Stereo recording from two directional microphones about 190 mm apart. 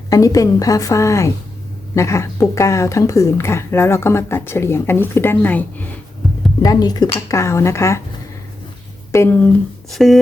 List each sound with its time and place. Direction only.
0.1 s speech: 20° left (ahead or behind)
6.6 s speech: 20° left (ahead or behind)
9.1 s speech: 10° left (ahead or behind)
9.9 s speech: centre (ahead or behind)